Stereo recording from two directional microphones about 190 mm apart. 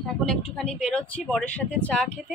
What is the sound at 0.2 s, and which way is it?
A woman's voice, 5° left (ahead or behind).